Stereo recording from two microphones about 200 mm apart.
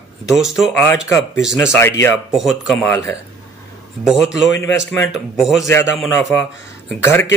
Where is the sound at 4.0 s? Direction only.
5° right (ahead or behind).